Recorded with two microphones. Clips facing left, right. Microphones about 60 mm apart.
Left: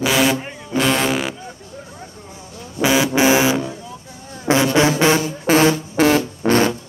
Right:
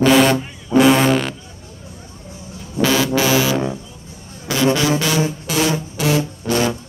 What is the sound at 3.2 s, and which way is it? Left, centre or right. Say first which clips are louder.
Music: left 2 dB; left.